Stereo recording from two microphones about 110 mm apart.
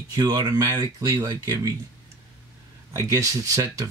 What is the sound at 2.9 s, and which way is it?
Speech, 30° right (ahead or behind).